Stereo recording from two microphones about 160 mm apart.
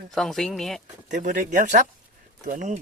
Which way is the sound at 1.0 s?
50° right (ahead or behind).